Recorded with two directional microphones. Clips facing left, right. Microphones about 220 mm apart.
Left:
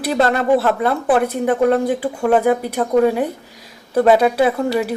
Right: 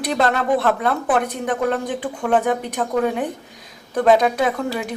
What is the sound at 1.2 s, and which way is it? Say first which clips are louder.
A woman's voice: left 6 dB; 10° left (ahead or behind).